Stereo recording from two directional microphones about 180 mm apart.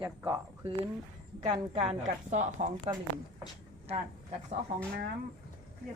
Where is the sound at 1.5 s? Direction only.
35° right (ahead or behind).